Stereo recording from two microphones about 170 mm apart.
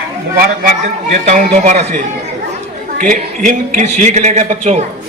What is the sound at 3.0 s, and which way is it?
A man's voice, 50° right (ahead or behind).